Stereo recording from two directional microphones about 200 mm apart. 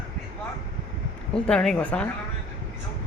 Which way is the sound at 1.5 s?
5° left (ahead or behind).